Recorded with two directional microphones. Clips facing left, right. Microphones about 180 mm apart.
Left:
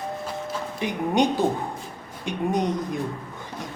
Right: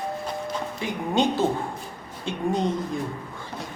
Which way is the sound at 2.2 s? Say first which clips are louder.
Left 1 dB; 15° left (ahead or behind).